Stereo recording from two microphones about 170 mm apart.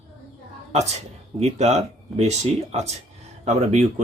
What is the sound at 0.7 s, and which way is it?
Speech, 40° right (ahead or behind).